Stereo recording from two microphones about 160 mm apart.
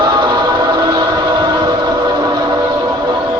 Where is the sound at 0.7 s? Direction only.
25° right (ahead or behind).